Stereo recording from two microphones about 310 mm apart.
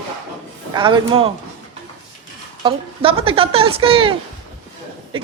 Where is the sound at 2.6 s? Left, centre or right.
Centre.